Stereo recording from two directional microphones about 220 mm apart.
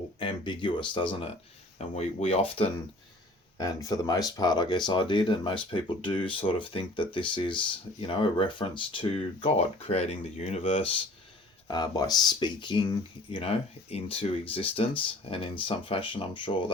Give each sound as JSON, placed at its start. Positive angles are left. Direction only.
{"t": 0.2, "sound": "speech", "side_deg": 20}
{"t": 3.6, "sound": "speech", "side_deg": 15}